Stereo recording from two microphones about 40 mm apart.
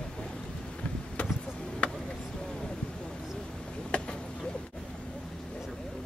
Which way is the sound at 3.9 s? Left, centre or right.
Left.